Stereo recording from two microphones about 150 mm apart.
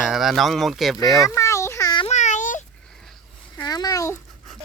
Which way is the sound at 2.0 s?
55° left (ahead or behind).